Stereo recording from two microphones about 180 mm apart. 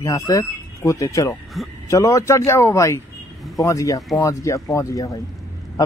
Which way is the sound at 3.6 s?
20° left (ahead or behind).